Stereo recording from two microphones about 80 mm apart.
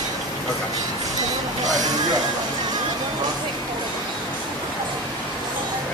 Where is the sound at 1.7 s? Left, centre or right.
Right.